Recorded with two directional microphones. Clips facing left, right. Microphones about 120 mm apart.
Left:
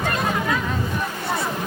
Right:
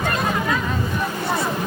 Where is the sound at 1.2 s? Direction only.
25° right (ahead or behind).